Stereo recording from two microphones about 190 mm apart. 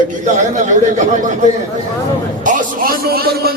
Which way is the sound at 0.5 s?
40° right (ahead or behind).